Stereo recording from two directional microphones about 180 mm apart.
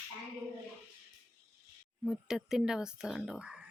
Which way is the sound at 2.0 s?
5° right (ahead or behind).